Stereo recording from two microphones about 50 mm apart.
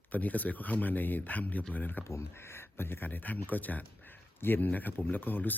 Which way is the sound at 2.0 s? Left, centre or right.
Left.